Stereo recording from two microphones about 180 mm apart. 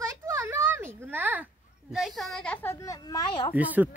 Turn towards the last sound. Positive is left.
turn(degrees=-10)  # may be behind; listen again after turning